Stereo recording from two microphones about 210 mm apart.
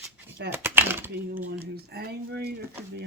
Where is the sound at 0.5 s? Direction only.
10° right (ahead or behind).